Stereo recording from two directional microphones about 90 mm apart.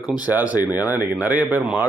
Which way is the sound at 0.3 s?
15° right (ahead or behind).